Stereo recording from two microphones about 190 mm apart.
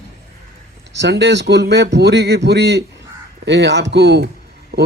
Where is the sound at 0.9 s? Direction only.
65° right (ahead or behind).